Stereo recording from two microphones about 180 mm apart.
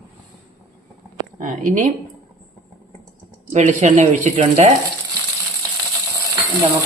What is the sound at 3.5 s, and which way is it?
Speech, 40° right (ahead or behind).